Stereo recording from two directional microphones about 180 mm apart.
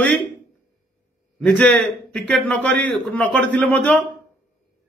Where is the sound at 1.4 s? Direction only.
5° left (ahead or behind).